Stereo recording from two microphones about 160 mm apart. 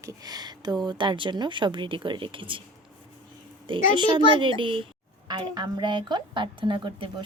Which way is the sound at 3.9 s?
30° right (ahead or behind).